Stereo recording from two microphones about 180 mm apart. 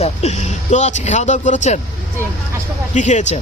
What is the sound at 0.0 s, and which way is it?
Speech, 40° left (ahead or behind).